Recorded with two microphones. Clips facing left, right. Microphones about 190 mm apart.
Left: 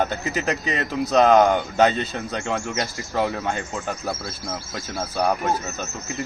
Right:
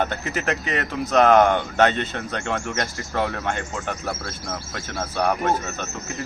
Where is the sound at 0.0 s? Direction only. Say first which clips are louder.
Left 1 dB; 10° left (ahead or behind).